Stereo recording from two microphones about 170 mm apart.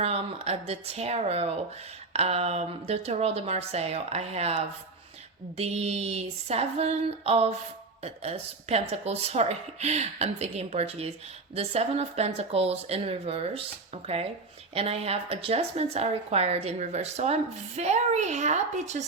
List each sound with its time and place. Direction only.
0.0 s speech: 40° right (ahead or behind)